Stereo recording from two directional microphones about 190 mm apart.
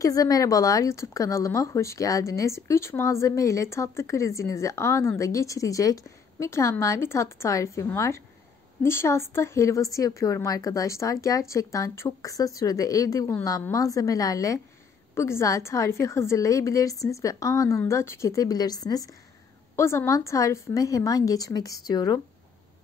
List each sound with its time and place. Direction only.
0.0 s speech: 15° left (ahead or behind)